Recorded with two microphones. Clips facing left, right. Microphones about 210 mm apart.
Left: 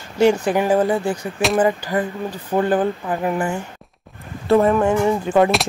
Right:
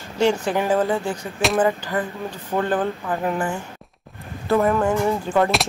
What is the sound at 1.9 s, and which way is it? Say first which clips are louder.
Speech: left 3 dB; 15° left (ahead or behind).